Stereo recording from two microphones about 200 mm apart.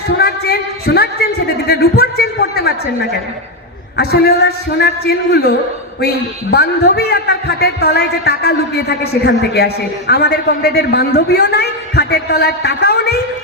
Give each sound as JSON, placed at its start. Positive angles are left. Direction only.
{"t": 0.2, "sound": "a sound", "side_deg": 50}
{"t": 3.9, "sound": "a woman's voice", "side_deg": 55}
{"t": 6.5, "sound": "a woman's voice", "side_deg": 55}